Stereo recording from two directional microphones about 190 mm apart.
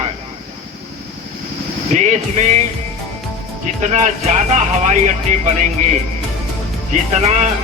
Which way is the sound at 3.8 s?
40° right (ahead or behind).